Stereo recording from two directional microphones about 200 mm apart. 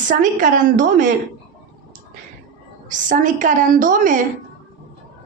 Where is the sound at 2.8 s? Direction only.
40° right (ahead or behind).